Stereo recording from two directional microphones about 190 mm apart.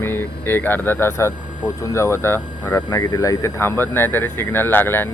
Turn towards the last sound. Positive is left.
turn(degrees=10)  # may be behind; listen again after turning